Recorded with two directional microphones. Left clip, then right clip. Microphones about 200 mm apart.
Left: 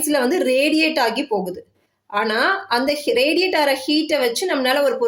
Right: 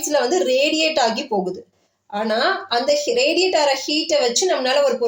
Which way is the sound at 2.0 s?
30° left (ahead or behind).